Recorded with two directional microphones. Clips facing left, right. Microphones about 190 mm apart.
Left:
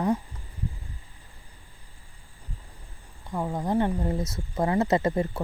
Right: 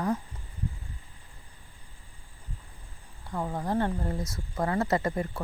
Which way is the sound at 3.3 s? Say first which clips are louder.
Left 3 dB; 10° left (ahead or behind).